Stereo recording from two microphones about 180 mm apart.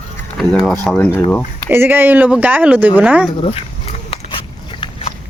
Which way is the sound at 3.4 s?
35° left (ahead or behind).